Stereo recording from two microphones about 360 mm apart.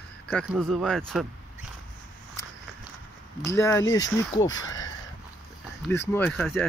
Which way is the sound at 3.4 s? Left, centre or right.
Centre.